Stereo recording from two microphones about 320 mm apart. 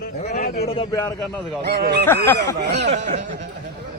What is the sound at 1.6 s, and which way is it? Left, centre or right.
Speech, right.